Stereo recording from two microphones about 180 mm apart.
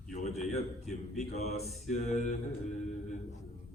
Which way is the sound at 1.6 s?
Centre (ahead or behind).